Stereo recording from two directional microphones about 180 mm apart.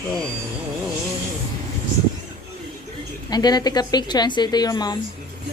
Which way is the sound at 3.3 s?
20° left (ahead or behind).